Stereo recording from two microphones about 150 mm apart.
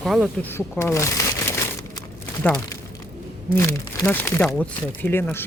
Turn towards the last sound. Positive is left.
turn(degrees=15)  # may be behind; listen again after turning